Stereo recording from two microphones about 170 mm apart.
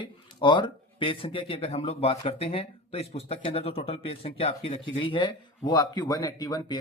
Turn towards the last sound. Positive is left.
turn(degrees=25)  # may be behind; listen again after turning